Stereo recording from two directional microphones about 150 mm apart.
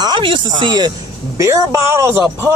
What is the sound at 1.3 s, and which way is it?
Speech, 20° right (ahead or behind).